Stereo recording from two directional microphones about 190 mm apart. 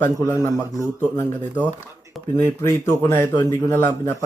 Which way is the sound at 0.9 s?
15° left (ahead or behind).